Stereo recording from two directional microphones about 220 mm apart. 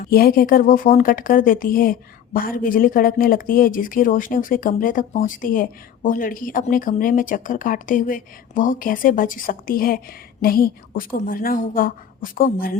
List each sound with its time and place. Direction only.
0.1 s speech: 45° left (ahead or behind)